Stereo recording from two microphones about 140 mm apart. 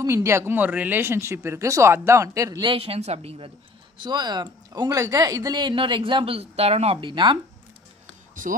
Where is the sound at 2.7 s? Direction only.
45° right (ahead or behind).